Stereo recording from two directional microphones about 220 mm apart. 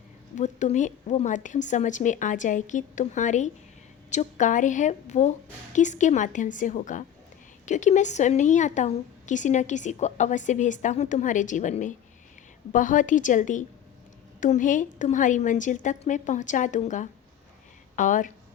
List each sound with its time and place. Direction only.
0.3 s a woman's voice: 35° left (ahead or behind)